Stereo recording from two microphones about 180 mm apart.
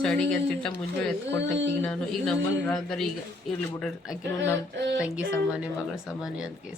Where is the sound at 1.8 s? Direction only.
5° left (ahead or behind).